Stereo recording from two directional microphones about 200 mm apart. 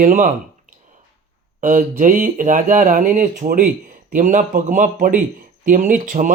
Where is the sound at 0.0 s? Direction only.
40° right (ahead or behind).